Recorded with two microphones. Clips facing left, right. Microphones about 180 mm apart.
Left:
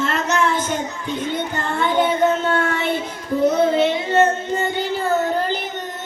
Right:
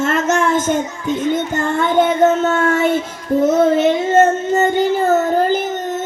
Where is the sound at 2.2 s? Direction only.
45° right (ahead or behind).